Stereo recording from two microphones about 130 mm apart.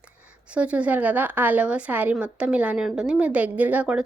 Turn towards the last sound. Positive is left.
turn(degrees=-10)  # may be behind; listen again after turning